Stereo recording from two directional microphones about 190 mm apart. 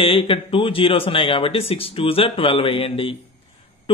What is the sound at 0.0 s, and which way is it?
Speech, 30° left (ahead or behind).